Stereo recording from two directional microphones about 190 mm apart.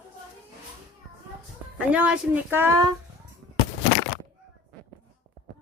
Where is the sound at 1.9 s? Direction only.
5° right (ahead or behind).